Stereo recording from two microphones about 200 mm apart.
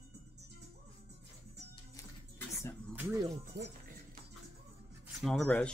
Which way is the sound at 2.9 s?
15° right (ahead or behind).